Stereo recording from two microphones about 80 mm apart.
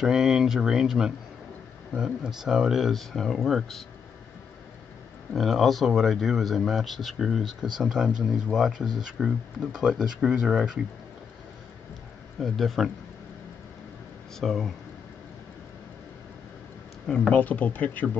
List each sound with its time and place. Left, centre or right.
0.0 s speech: centre
5.3 s speech: centre
12.4 s speech: centre
14.4 s speech: centre
17.3 s speech: left